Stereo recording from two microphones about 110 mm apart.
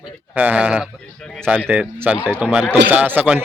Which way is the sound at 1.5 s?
15° right (ahead or behind).